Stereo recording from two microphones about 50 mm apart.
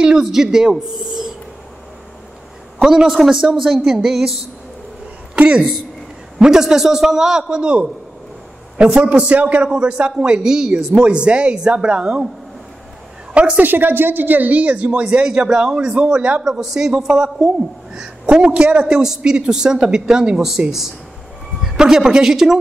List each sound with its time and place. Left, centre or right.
0.0 s a woman's voice: centre
2.8 s a man's voice: centre
6.4 s a man's voice: centre
13.3 s a woman's voice: right
13.6 s speech: right
16.4 s a man's voice: centre